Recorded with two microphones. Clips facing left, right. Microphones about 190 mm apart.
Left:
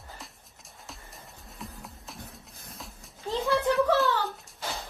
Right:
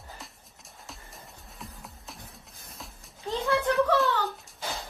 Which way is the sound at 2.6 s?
Centre (ahead or behind).